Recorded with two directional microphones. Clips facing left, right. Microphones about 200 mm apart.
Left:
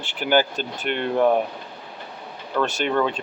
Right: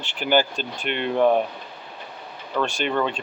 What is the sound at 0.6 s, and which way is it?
Speech, 50° left (ahead or behind).